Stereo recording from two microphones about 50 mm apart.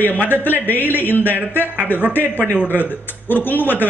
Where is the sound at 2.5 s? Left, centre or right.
Left.